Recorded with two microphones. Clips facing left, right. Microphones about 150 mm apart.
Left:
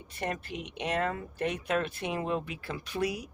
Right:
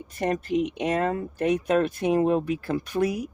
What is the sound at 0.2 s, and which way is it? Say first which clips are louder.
A woman's voice: right 11 dB; 45° right (ahead or behind).